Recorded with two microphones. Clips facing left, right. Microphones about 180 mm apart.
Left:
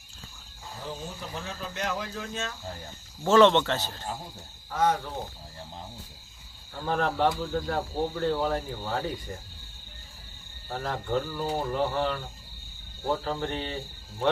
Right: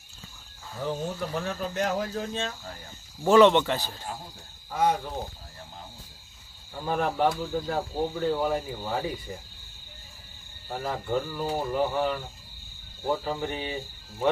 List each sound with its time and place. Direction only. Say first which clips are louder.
0.8 s speech: right 8 dB; 55° right (ahead or behind); by 2.5 s 30° right (ahead or behind)
3.2 s speech: right 1 dB; 15° right (ahead or behind)
6.7 s speech: even; 10° right (ahead or behind)
10.7 s speech: right 1 dB; 5° right (ahead or behind)